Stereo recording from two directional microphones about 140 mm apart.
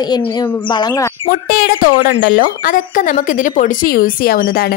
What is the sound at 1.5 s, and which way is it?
Speech, 90° left.